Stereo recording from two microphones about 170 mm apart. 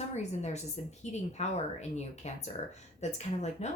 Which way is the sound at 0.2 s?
40° left (ahead or behind).